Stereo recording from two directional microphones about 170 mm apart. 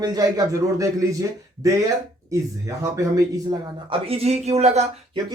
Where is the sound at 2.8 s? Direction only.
20° right (ahead or behind); by 4.8 s 40° right (ahead or behind).